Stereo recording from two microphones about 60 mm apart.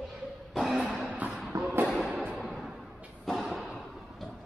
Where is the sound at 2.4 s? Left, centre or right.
Centre.